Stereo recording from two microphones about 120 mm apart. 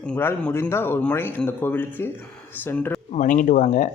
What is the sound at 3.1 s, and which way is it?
Speech, 90° left.